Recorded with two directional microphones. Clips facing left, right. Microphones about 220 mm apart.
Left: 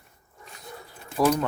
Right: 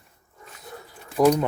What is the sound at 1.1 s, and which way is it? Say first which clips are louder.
Speech: right 4 dB; 20° right (ahead or behind).